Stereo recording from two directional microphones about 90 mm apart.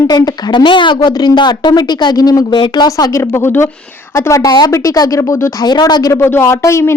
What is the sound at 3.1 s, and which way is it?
Speech, 30° left (ahead or behind).